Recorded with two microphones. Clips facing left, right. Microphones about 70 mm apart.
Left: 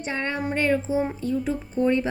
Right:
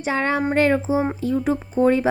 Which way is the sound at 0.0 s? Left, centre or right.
Right.